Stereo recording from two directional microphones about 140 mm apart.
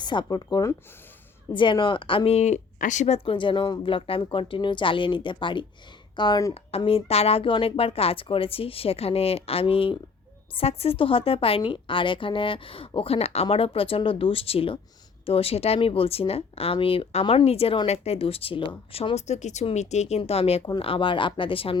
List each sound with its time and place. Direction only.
0.0 s a woman's voice: 30° left (ahead or behind); by 3.2 s 55° left (ahead or behind)
3.2 s a woman's voice: 35° left (ahead or behind)
6.5 s a woman's voice: 45° left (ahead or behind)